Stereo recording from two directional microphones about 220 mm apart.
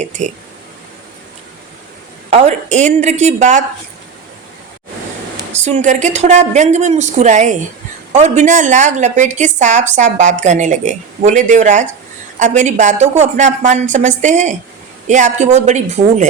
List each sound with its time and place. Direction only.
0.0 s speech: 35° right (ahead or behind)
2.3 s a woman's voice: 30° right (ahead or behind)
5.5 s a woman's voice: 30° right (ahead or behind)